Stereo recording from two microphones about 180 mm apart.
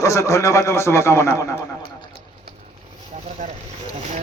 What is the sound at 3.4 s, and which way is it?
Boat, 40° right (ahead or behind).